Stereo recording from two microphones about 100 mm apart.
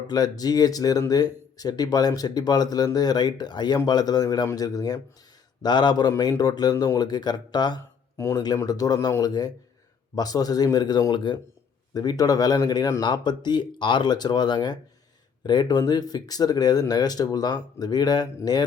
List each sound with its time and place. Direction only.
0.1 s a man's voice: 40° left (ahead or behind)
8.1 s speech: 30° left (ahead or behind); by 11.3 s 50° left (ahead or behind)
11.9 s a man's voice: 40° left (ahead or behind)